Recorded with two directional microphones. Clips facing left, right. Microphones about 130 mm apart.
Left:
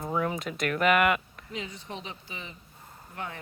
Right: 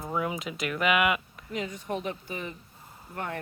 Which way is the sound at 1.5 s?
50° right (ahead or behind).